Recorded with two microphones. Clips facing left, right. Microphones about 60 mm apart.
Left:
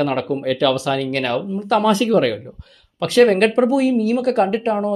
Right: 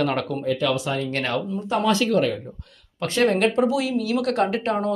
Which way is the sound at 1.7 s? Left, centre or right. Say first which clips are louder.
Left 7 dB; left.